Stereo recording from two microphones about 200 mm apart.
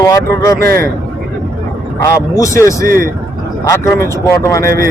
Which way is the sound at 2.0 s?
15° left (ahead or behind).